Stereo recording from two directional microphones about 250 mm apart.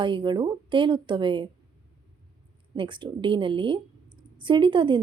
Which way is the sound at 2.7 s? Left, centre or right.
Centre.